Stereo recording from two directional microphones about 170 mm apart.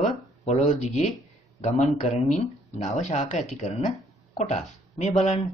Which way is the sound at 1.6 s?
40° left (ahead or behind).